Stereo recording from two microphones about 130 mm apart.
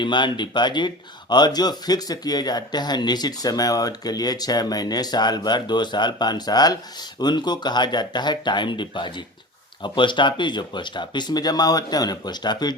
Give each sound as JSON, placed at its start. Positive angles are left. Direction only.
{"t": 0.0, "sound": "speech", "side_deg": 35}